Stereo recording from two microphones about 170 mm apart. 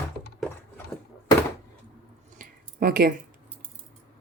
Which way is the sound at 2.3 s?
60° right (ahead or behind).